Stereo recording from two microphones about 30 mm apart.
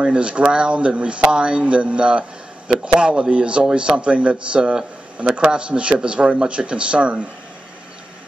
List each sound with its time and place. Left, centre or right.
0.1 s speech: right
4.6 s a man's voice: right